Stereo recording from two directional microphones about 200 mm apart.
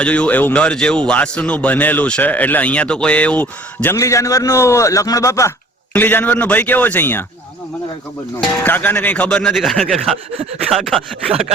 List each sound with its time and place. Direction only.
0.0 s a man's voice: 5° left (ahead or behind)
8.6 s speech: 10° left (ahead or behind)
11.3 s sawing: 30° right (ahead or behind)